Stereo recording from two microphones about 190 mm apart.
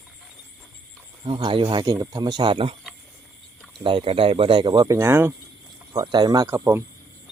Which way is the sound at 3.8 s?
25° right (ahead or behind).